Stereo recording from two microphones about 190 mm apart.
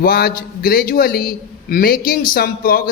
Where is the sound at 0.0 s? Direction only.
50° left (ahead or behind).